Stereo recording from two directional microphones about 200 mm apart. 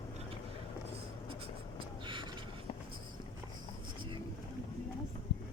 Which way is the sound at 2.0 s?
25° right (ahead or behind).